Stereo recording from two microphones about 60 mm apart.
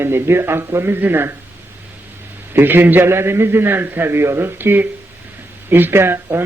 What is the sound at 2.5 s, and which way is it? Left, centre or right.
A man's voice, right.